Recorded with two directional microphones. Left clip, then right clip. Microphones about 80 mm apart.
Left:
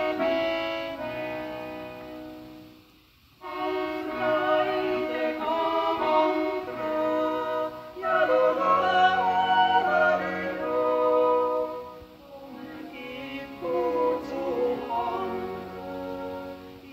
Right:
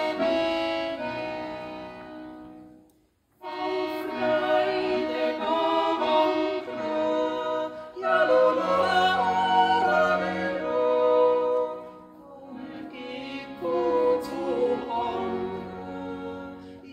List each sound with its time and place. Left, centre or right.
0.0 s music: centre
3.4 s music: centre
13.7 s music: right